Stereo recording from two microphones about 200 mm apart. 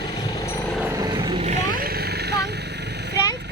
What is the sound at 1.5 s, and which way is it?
Vehicle, 40° right (ahead or behind).